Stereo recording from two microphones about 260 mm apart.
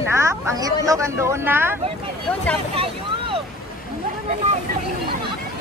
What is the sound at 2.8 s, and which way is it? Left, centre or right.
Speech, right.